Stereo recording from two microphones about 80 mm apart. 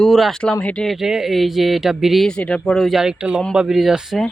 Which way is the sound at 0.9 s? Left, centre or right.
Centre.